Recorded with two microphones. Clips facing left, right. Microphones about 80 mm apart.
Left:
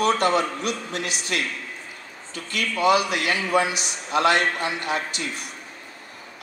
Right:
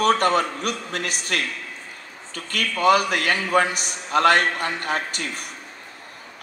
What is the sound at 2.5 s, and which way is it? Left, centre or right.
A man's voice, right.